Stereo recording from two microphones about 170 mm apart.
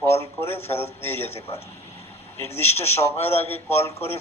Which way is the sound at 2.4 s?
15° left (ahead or behind).